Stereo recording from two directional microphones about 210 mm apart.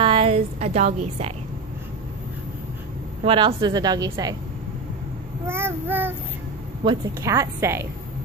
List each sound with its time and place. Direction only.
0.0 s a woman's voice: 25° right (ahead or behind)
3.3 s a woman's voice: 20° right (ahead or behind)
5.5 s a woman's voice: 10° right (ahead or behind)